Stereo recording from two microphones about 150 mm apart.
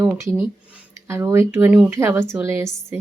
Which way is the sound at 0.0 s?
10° right (ahead or behind).